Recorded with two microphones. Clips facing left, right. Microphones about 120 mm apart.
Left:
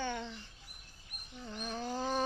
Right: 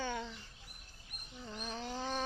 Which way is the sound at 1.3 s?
Centre (ahead or behind).